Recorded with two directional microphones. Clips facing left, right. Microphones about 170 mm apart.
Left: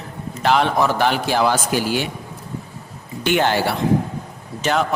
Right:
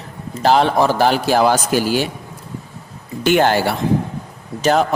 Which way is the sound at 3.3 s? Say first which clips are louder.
Right 4 dB; 45° right (ahead or behind).